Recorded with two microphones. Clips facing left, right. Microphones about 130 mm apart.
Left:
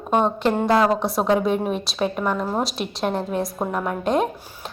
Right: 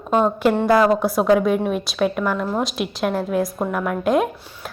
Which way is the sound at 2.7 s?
Centre (ahead or behind).